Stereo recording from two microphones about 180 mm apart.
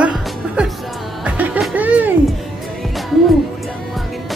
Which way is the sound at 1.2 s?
5° right (ahead or behind).